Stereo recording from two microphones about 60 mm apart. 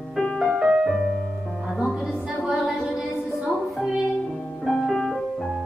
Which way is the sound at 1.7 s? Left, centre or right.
Centre.